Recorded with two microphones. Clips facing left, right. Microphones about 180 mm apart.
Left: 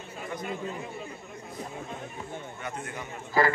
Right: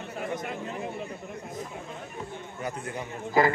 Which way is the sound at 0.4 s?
60° right (ahead or behind).